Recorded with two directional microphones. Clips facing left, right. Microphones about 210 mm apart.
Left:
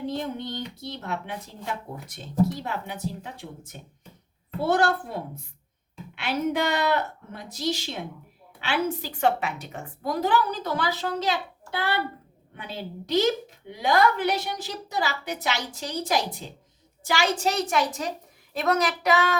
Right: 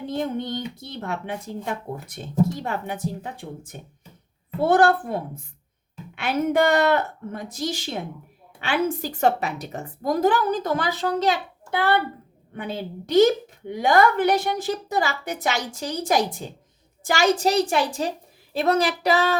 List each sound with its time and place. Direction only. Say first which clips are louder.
0.2 s a woman's voice: right 5 dB; 50° right (ahead or behind)
12.5 s a woman's voice: right 5 dB; 50° right (ahead or behind); by 19.4 s 35° right (ahead or behind)